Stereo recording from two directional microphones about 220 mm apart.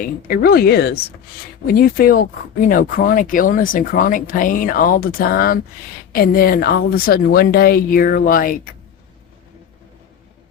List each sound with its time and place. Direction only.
0.0 s speech: 45° left (ahead or behind)